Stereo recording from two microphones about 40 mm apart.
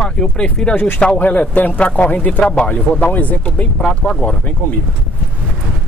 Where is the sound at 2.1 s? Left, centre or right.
Left.